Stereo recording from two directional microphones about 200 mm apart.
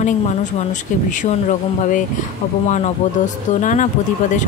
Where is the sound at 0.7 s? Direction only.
40° left (ahead or behind).